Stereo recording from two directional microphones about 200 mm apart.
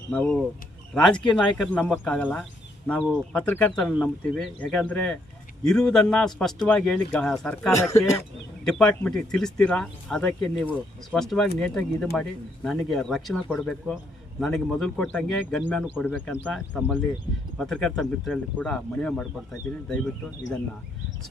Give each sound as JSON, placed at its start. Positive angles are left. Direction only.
{"t": 0.1, "sound": "speech", "side_deg": 5}
{"t": 7.7, "sound": "speech", "side_deg": 15}
{"t": 8.6, "sound": "speech", "side_deg": 5}